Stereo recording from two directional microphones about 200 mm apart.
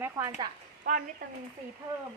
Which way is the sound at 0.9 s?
45° right (ahead or behind).